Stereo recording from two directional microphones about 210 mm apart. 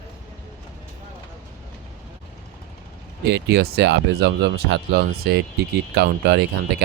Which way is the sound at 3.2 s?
50° right (ahead or behind).